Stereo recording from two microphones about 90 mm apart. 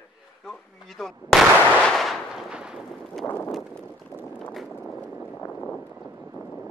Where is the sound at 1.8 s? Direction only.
5° left (ahead or behind).